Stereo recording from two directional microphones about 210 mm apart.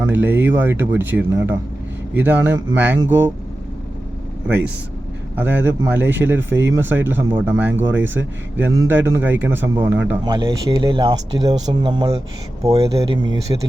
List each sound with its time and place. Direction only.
0.0 s speech: 10° right (ahead or behind)
5.4 s speech: 10° right (ahead or behind)